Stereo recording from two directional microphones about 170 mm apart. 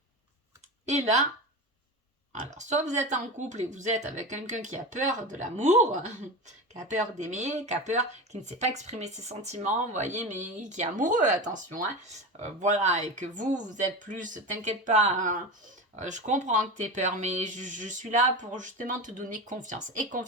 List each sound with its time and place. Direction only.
2.3 s speech: 45° right (ahead or behind)